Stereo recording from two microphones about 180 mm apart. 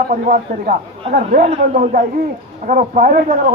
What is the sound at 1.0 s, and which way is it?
A man's voice, 35° right (ahead or behind).